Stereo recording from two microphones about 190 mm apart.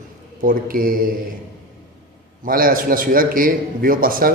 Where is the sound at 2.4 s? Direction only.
50° right (ahead or behind).